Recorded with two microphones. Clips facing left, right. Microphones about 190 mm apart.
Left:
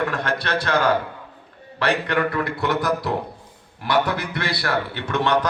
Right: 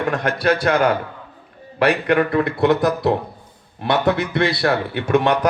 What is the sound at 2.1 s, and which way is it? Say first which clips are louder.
A man's voice: right 5 dB; 25° right (ahead or behind).